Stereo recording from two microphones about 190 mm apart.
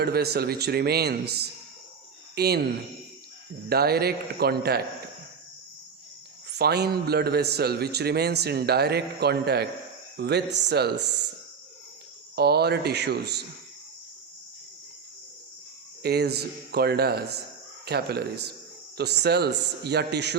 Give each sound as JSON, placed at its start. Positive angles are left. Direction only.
{"t": 0.0, "sound": "a man's voice", "side_deg": -55}
{"t": 3.7, "sound": "a man's voice", "side_deg": -55}
{"t": 6.6, "sound": "a man's voice", "side_deg": -55}
{"t": 12.4, "sound": "a man's voice", "side_deg": -60}
{"t": 16.0, "sound": "a man's voice", "side_deg": -60}